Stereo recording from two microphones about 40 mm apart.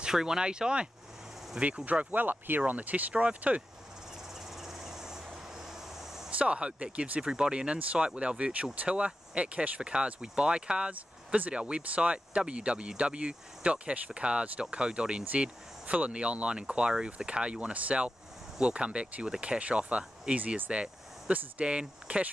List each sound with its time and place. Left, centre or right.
0.0 s speech: centre
2.0 s speech: right
4.6 s cricket: centre
6.3 s speech: right
10.9 s speech: right
11.5 s speech: right
20.3 s speech: right
21.3 s speech: right